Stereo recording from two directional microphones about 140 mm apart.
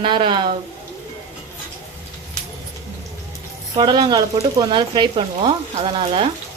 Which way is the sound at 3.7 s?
30° right (ahead or behind).